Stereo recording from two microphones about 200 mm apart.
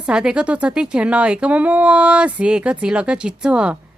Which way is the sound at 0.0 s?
5° right (ahead or behind).